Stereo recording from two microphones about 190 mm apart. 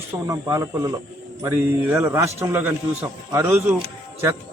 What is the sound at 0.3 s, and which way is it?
A man's voice, 15° right (ahead or behind).